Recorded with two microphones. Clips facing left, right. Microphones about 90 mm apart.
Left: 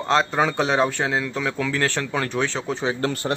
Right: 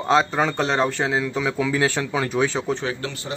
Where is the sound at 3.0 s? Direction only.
50° left (ahead or behind).